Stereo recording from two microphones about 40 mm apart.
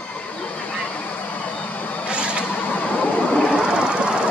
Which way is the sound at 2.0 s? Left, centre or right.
Right.